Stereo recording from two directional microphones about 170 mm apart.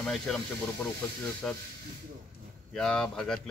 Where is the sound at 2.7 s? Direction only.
5° left (ahead or behind).